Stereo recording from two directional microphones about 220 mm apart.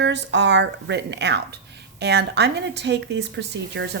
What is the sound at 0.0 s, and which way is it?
A woman's voice, 55° right (ahead or behind).